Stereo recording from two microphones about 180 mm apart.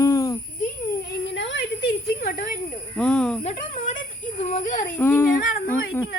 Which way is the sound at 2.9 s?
5° left (ahead or behind).